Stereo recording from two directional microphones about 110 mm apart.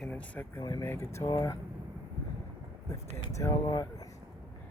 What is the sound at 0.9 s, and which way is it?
Speech, 25° left (ahead or behind).